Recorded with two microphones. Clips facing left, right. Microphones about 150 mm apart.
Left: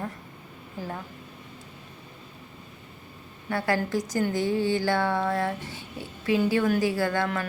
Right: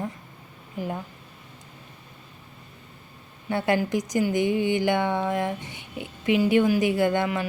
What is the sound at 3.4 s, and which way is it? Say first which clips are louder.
Speech: right 3 dB; 20° right (ahead or behind).